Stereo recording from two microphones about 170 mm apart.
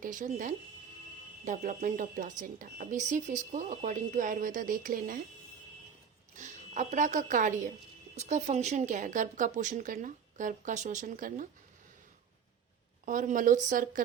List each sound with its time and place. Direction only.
0.0 s speech: 50° right (ahead or behind)
6.3 s speech: 45° right (ahead or behind)
13.1 s speech: 50° right (ahead or behind)